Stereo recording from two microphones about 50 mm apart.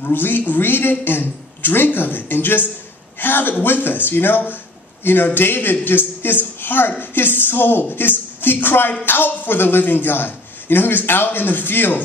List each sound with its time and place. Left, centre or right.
0.0 s a man's voice: left